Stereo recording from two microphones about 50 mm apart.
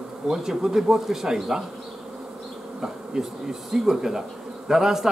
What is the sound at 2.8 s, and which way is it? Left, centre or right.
Speech, centre.